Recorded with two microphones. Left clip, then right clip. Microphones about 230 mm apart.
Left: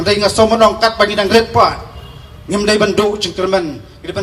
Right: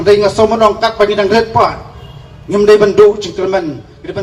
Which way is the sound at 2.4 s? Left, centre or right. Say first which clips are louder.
Right 6 dB; left.